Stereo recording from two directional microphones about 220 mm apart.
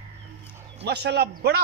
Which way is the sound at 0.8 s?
50° right (ahead or behind).